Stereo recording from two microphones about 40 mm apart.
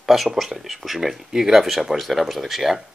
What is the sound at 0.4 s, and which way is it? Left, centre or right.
Speech, centre.